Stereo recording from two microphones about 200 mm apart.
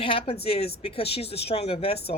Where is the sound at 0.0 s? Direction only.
25° left (ahead or behind).